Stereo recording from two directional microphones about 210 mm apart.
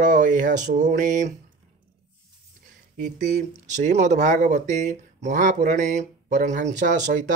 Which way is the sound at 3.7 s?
35° right (ahead or behind).